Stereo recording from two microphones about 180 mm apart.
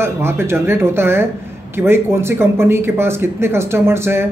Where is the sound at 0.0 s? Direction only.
15° right (ahead or behind).